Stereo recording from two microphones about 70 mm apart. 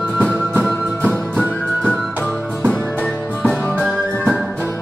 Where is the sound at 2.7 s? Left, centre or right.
Centre.